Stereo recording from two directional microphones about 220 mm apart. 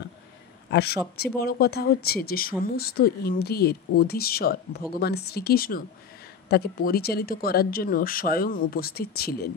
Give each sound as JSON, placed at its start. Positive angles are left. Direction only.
{"t": 0.7, "sound": "speech", "side_deg": 45}